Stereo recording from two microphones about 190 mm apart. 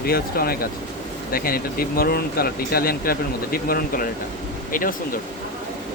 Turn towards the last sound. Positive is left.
turn(degrees=45)  # may be behind; listen again after turning